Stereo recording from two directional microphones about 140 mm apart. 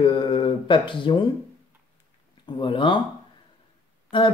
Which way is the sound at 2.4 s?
35° left (ahead or behind).